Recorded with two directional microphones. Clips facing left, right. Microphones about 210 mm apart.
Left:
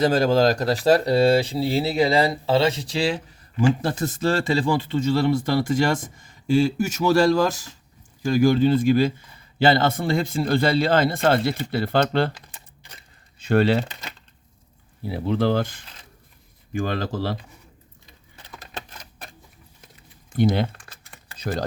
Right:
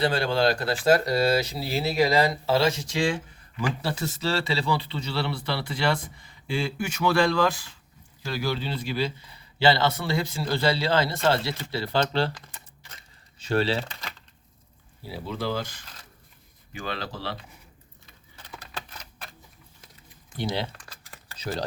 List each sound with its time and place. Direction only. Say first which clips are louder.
0.0 s speech: left 5 dB; 45° left (ahead or behind)
3.8 s speech: left 5 dB; 50° left (ahead or behind)
13.4 s speech: left 6 dB; 55° left (ahead or behind)
15.0 s speech: left 9 dB; 55° left (ahead or behind)
20.3 s speech: left 9 dB; 50° left (ahead or behind)